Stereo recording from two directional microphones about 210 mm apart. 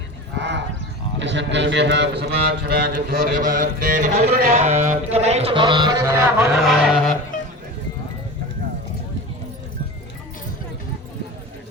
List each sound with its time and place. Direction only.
0.3 s clip-clop: 55° right (ahead or behind)
1.2 s a man's voice: 60° right (ahead or behind); by 6.6 s 10° right (ahead or behind)
6.6 s a sound: centre (ahead or behind)
7.3 s music: 40° left (ahead or behind)